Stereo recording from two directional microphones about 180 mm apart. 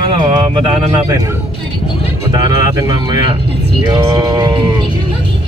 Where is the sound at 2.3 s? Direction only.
20° right (ahead or behind).